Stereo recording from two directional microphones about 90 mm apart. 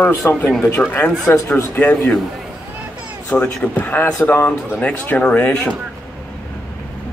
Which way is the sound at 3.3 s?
15° left (ahead or behind).